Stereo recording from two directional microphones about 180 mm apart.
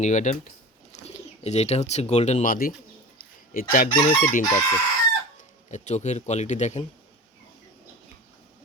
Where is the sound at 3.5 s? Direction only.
50° left (ahead or behind).